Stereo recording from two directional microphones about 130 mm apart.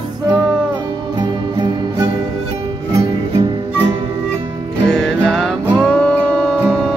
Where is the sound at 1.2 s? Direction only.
35° right (ahead or behind).